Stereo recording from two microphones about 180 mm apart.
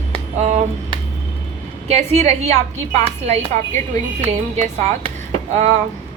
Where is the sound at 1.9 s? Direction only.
40° right (ahead or behind).